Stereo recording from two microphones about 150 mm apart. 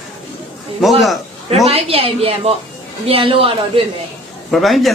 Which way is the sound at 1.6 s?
40° right (ahead or behind).